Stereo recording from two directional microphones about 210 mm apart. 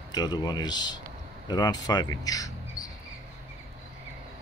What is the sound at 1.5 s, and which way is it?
Speech, 20° left (ahead or behind).